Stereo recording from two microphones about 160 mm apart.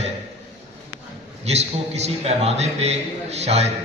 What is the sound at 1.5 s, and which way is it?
A man's voice, 40° right (ahead or behind).